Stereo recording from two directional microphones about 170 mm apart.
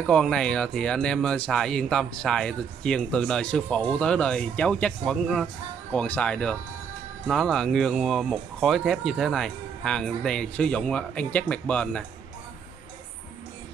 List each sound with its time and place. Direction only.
0.0 s speech: 5° left (ahead or behind)